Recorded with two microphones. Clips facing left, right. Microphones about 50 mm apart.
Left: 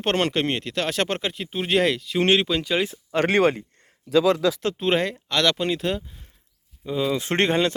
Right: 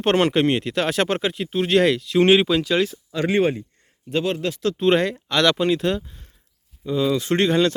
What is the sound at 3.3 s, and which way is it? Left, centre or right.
Speech, left.